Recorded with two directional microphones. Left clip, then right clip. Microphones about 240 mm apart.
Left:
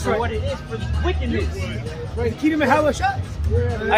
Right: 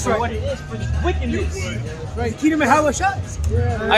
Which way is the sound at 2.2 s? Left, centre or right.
Centre.